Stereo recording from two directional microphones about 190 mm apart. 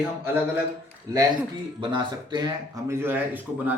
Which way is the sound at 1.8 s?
25° right (ahead or behind).